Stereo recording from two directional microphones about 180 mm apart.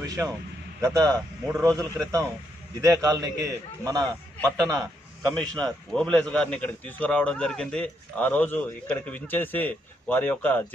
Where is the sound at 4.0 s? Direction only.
5° left (ahead or behind).